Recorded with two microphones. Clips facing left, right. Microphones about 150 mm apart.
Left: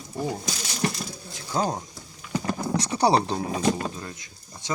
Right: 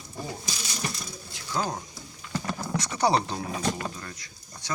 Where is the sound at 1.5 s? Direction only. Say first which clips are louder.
Left 4 dB; 40° left (ahead or behind).